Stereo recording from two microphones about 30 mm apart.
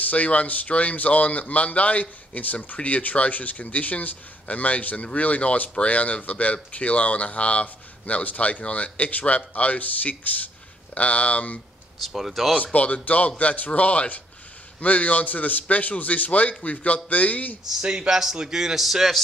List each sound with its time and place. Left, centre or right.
0.1 s speech: left
12.0 s speech: centre
12.7 s speech: left
17.8 s a man's voice: right; by 19.1 s centre